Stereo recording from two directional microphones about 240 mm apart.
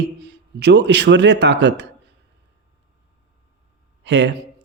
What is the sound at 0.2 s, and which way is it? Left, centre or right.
Speech, right.